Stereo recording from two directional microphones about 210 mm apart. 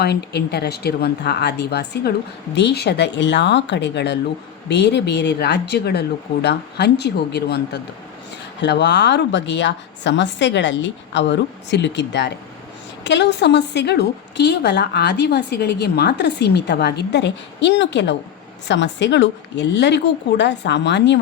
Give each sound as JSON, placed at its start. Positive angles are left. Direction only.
{"t": 0.0, "sound": "a woman's voice", "side_deg": 50}